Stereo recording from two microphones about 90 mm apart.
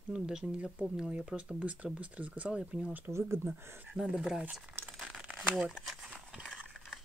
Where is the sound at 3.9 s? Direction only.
5° right (ahead or behind).